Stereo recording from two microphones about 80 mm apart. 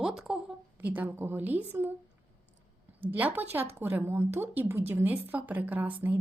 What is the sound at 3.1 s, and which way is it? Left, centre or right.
A woman's voice, right.